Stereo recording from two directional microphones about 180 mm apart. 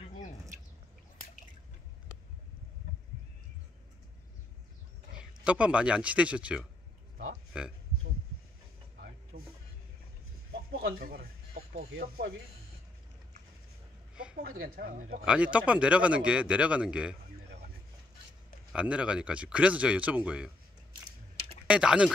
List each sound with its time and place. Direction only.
5.1 s speech: 5° right (ahead or behind)
9.3 s vehicle: 60° right (ahead or behind)
10.5 s a sound: 60° right (ahead or behind)
11.9 s mechanisms: 75° right (ahead or behind)
14.5 s speech: 55° right (ahead or behind)
15.2 s speech: 5° right (ahead or behind)
18.7 s speech: 5° right (ahead or behind)
21.6 s speech: 5° right (ahead or behind)